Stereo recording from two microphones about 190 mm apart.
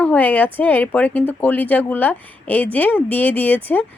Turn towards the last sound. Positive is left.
turn(degrees=10)  # may be behind; listen again after turning